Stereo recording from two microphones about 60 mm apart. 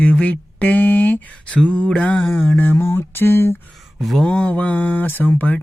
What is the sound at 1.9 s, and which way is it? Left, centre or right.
Mantra, centre.